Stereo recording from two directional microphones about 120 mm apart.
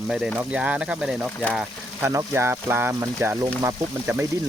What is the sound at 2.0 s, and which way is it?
Speech, 20° right (ahead or behind).